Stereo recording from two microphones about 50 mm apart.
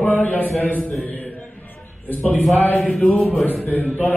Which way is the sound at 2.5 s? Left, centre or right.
Left.